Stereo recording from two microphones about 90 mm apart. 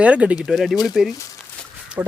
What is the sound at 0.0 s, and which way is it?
Speech, 15° right (ahead or behind).